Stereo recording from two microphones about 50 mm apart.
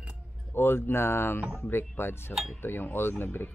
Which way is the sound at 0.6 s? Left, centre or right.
Left.